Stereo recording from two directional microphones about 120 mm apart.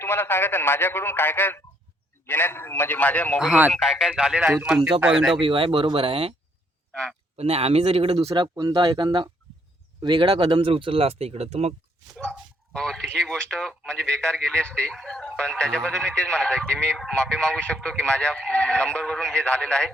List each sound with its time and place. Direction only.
0.0 s speech: 20° left (ahead or behind)
3.7 s a man's voice: centre (ahead or behind)
5.4 s speech: 45° right (ahead or behind)
7.3 s speech: 60° right (ahead or behind)
8.5 s speech: 40° right (ahead or behind); by 11.7 s 60° right (ahead or behind)
12.1 s speech: 10° left (ahead or behind)